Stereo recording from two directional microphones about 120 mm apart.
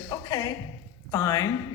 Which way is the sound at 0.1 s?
30° left (ahead or behind).